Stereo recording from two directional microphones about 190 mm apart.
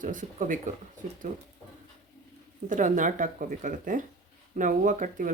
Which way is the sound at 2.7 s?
40° right (ahead or behind).